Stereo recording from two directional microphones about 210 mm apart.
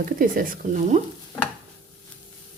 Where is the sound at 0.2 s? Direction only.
40° right (ahead or behind).